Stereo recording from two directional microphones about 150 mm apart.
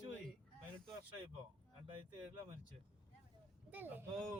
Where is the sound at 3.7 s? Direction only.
10° right (ahead or behind).